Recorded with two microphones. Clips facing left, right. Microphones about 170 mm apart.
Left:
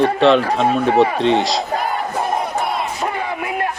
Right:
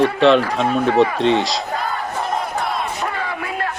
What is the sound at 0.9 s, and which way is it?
Speech, 30° left (ahead or behind).